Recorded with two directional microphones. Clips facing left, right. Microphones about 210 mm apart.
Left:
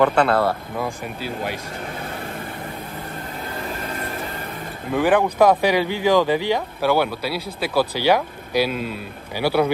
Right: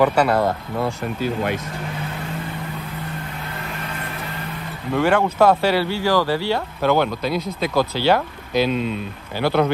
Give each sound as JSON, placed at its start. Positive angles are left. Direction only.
{"t": 0.0, "sound": "speech", "side_deg": -10}
{"t": 1.2, "sound": "speech", "side_deg": -55}
{"t": 4.9, "sound": "speech", "side_deg": 15}